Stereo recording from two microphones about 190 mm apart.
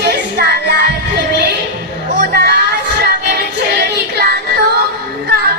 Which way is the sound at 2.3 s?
60° right (ahead or behind).